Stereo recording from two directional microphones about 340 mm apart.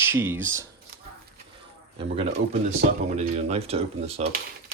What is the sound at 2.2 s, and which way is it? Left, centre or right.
Speech, centre.